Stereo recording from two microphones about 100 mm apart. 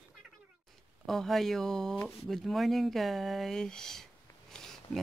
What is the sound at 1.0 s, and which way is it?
Speech, centre (ahead or behind).